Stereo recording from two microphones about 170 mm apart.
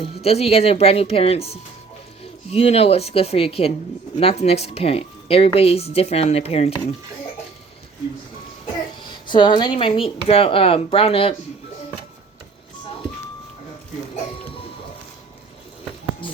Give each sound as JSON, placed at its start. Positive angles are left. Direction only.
{"t": 0.0, "sound": "speech", "side_deg": 35}
{"t": 9.0, "sound": "speech", "side_deg": 25}
{"t": 16.2, "sound": "a sound", "side_deg": 30}